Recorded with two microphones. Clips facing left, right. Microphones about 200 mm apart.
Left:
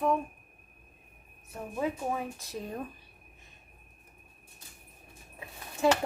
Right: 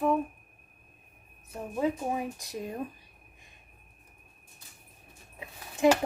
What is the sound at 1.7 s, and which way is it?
Speech, 15° right (ahead or behind).